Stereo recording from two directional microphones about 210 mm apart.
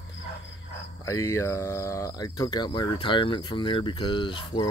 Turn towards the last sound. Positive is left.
turn(degrees=25)  # may be behind; listen again after turning